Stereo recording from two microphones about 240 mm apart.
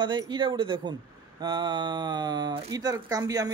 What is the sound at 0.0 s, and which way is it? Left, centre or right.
Speech, centre.